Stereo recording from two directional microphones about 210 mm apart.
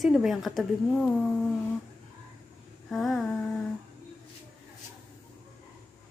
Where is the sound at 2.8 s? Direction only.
Centre (ahead or behind).